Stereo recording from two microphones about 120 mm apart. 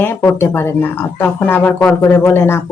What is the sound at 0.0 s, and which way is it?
Speech, 20° left (ahead or behind).